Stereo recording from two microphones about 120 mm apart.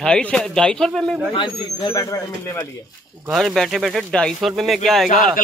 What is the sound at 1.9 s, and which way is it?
Speech, 25° left (ahead or behind).